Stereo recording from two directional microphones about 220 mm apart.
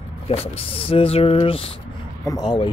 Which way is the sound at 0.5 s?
25° left (ahead or behind).